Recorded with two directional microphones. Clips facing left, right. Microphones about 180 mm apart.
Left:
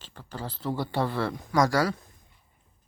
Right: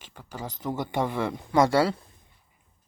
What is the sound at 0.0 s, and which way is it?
Speech, 10° right (ahead or behind).